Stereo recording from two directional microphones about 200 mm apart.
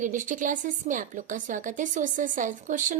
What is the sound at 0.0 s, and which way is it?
A woman's voice, 40° right (ahead or behind).